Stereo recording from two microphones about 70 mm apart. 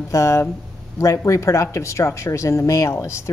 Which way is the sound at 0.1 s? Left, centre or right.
Left.